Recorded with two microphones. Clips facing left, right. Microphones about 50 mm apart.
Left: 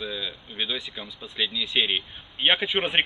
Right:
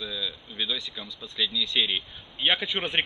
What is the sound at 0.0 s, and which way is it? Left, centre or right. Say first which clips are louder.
Speech: left 1 dB; left.